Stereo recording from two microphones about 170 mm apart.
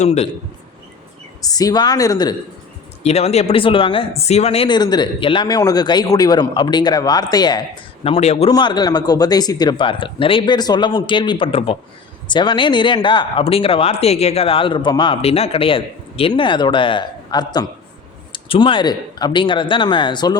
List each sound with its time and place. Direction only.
0.0 s a man's voice: 40° left (ahead or behind)
1.4 s speech: 20° left (ahead or behind)
3.0 s speech: 40° left (ahead or behind); by 7.6 s 25° left (ahead or behind)
8.0 s a man's voice: 35° left (ahead or behind)
8.4 s speech: 25° left (ahead or behind)